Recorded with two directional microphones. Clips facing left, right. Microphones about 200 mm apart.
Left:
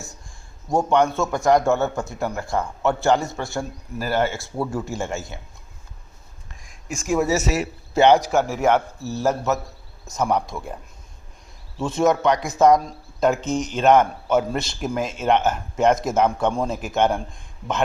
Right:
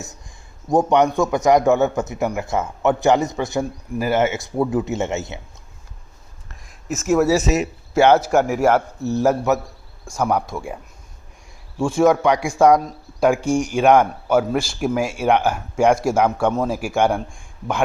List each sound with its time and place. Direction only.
0.7 s a man's voice: 20° right (ahead or behind)
6.7 s speech: 5° right (ahead or behind); by 7.7 s 20° right (ahead or behind)
7.9 s a man's voice: 15° left (ahead or behind)
8.4 s speech: 10° right (ahead or behind)
9.0 s speech: 20° right (ahead or behind)
11.8 s speech: 10° right (ahead or behind)